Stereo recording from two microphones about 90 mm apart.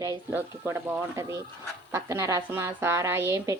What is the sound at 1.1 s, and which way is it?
Speech, 35° right (ahead or behind).